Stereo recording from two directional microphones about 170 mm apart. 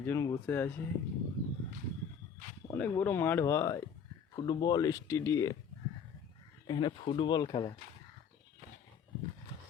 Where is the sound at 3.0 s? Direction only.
10° left (ahead or behind).